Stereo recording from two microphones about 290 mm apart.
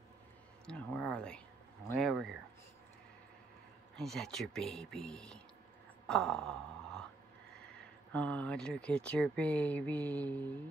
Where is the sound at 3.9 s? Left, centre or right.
Centre.